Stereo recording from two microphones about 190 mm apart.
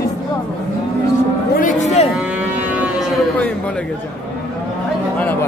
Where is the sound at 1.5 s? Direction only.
45° left (ahead or behind).